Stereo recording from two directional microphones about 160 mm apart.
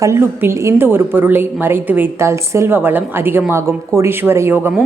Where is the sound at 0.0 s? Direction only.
15° right (ahead or behind).